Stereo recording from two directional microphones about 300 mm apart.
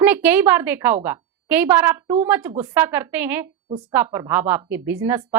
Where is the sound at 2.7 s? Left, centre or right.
Centre.